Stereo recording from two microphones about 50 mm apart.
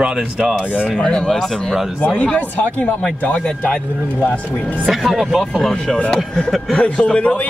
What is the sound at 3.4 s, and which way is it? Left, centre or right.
Speech, left.